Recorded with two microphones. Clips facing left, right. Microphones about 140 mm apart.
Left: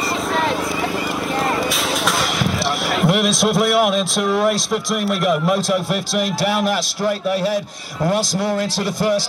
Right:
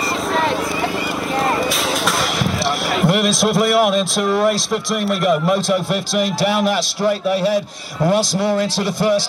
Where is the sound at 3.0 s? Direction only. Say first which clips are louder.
Right 1 dB; centre (ahead or behind).